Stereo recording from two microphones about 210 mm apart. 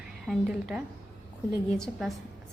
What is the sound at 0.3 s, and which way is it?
Speech, centre (ahead or behind).